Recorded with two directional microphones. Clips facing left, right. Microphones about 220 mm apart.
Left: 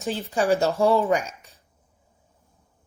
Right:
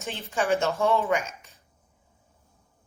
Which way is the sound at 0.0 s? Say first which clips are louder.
Left 5 dB; 35° left (ahead or behind).